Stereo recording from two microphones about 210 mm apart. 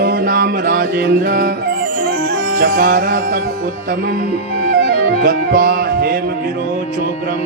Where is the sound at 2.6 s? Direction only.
40° right (ahead or behind).